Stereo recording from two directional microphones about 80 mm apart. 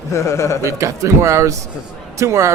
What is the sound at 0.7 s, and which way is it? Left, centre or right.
Speech, right.